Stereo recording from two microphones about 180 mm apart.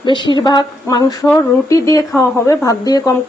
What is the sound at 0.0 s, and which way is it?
Speech, 25° left (ahead or behind).